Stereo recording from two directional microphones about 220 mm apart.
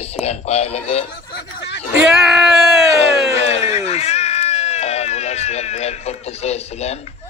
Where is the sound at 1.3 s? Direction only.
50° left (ahead or behind).